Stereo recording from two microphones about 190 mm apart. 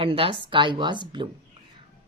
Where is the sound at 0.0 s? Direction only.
30° right (ahead or behind).